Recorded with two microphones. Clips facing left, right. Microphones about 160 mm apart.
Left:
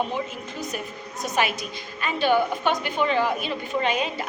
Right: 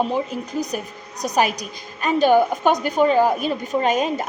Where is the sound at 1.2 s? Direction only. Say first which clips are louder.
Right 5 dB; 40° right (ahead or behind).